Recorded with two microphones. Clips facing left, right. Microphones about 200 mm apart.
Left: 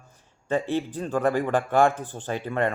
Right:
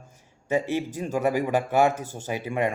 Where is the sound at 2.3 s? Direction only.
10° right (ahead or behind).